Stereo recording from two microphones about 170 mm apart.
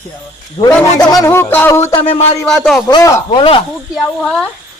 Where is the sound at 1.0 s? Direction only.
20° left (ahead or behind).